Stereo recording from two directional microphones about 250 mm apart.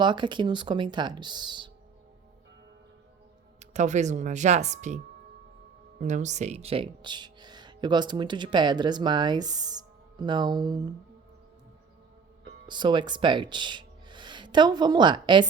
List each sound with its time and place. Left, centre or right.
0.0 s speech: centre
3.6 s speech: right
12.6 s speech: centre